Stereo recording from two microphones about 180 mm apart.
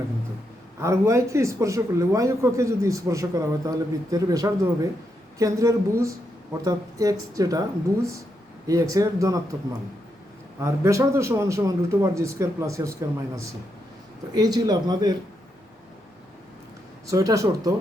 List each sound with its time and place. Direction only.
0.8 s a man's voice: 15° right (ahead or behind)
8.6 s speech: 20° right (ahead or behind)
10.6 s a man's voice: 15° right (ahead or behind)
17.1 s speech: 20° right (ahead or behind)